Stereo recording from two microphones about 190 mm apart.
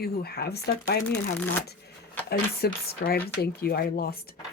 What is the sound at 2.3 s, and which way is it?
Speech, 55° left (ahead or behind).